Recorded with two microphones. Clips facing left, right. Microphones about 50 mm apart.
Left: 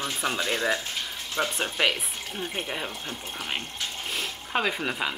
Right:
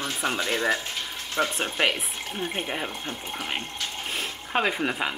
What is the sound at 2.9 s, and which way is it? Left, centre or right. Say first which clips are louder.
Speech: right 2 dB; right.